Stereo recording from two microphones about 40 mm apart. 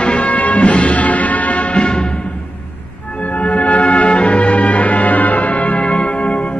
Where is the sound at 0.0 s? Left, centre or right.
Left.